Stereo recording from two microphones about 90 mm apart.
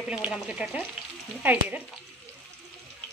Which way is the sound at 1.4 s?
20° right (ahead or behind).